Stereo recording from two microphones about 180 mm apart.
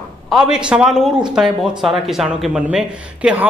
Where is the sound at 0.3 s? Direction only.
5° right (ahead or behind).